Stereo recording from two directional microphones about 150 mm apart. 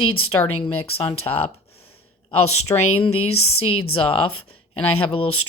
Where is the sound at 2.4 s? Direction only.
45° left (ahead or behind).